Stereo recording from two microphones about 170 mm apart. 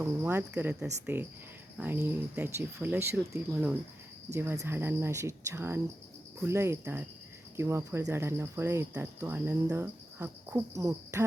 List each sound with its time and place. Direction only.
0.0 s speech: 15° right (ahead or behind)